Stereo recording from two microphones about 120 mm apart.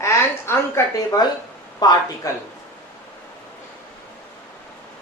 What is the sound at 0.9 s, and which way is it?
Speech, 35° left (ahead or behind).